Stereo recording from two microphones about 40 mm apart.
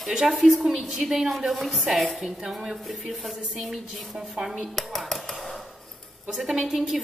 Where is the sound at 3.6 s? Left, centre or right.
Centre.